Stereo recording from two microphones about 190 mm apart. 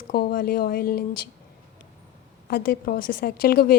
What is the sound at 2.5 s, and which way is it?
Speech, 55° left (ahead or behind).